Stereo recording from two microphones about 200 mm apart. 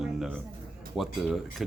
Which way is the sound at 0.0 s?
Centre (ahead or behind).